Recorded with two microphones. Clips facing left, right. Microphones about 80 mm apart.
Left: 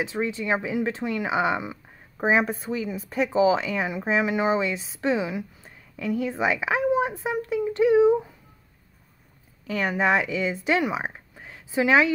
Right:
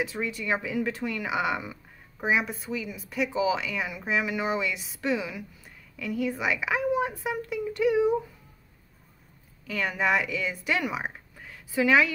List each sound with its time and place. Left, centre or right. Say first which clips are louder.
0.0 s a woman's voice: left 4 dB; left
2.1 s a woman's voice: left 5 dB; left
9.7 s speech: left 4 dB; left